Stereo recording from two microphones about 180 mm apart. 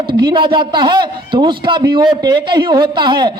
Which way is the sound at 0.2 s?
25° right (ahead or behind).